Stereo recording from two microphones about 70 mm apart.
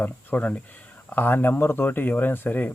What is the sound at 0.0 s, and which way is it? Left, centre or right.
Speech, left.